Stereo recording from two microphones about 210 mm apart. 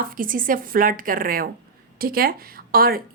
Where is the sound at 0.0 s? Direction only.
40° right (ahead or behind).